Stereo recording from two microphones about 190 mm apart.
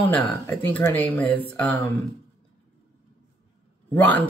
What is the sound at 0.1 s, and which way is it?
Speech, 15° left (ahead or behind).